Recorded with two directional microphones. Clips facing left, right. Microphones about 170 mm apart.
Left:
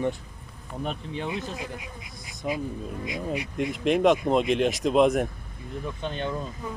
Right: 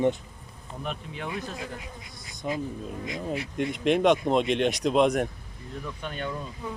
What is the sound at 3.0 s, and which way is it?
Bee, 15° left (ahead or behind).